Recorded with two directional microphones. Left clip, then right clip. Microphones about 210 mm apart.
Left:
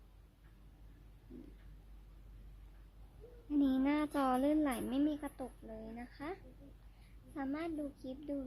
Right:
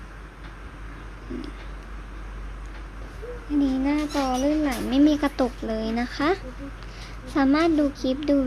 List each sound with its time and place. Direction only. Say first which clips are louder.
3.6 s a child's voice: right 9 dB; 25° left (ahead or behind)
4.9 s speech: right 17 dB; 5° left (ahead or behind)